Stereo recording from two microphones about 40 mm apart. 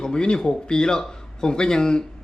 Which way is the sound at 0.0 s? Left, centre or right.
Left.